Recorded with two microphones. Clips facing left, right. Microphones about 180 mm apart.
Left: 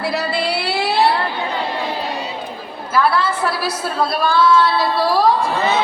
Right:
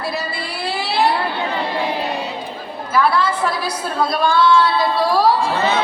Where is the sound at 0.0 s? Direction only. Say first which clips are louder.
Left 5 dB; 70° left (ahead or behind).